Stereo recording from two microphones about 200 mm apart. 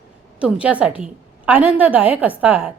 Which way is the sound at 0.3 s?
5° right (ahead or behind).